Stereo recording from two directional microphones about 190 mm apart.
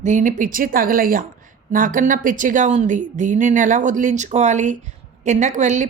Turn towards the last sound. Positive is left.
turn(degrees=-40)  # may be behind; listen again after turning